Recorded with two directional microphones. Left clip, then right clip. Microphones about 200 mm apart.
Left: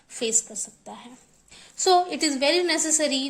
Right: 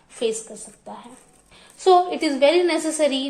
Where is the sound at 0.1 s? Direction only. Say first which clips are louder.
Right 2 dB; 40° left (ahead or behind).